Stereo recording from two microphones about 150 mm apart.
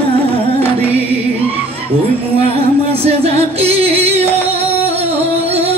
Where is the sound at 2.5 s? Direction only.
40° right (ahead or behind).